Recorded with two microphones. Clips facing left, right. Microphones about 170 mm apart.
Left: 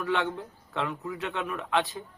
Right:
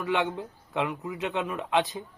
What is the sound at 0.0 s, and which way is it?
Speech, 15° right (ahead or behind).